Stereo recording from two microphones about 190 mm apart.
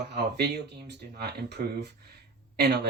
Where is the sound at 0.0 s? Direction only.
60° right (ahead or behind).